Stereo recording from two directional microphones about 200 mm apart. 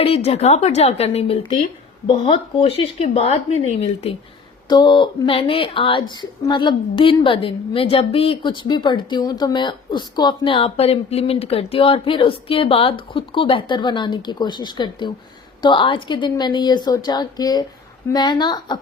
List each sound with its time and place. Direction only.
0.0 s speech: 30° left (ahead or behind)
4.7 s a woman's voice: 20° left (ahead or behind)